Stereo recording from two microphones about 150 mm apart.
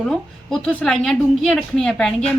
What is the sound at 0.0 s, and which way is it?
A woman's voice, 5° left (ahead or behind).